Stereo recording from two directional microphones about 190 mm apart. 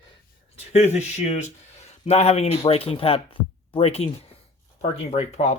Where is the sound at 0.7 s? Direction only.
35° left (ahead or behind).